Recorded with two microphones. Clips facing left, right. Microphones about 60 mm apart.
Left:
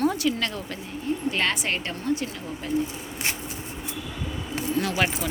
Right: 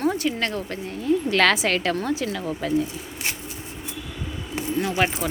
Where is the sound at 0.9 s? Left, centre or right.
Right.